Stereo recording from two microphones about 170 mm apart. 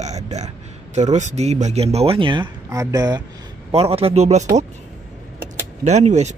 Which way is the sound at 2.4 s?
20° right (ahead or behind).